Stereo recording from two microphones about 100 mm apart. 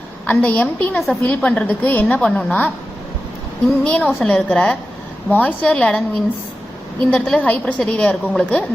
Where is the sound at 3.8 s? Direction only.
10° left (ahead or behind).